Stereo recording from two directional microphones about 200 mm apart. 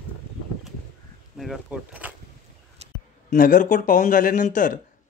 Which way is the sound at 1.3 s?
Centre (ahead or behind).